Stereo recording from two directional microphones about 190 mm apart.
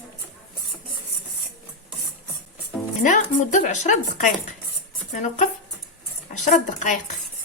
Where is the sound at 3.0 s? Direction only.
40° left (ahead or behind).